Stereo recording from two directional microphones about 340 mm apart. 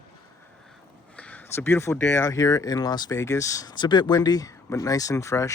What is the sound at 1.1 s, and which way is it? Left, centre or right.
Speech, centre.